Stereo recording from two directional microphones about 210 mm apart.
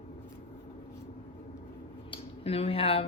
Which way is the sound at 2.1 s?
30° left (ahead or behind).